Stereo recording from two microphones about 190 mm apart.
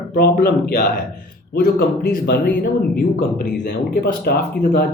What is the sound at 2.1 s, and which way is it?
Speech, 50° left (ahead or behind).